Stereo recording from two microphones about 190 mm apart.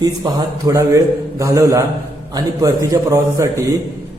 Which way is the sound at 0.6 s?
15° right (ahead or behind).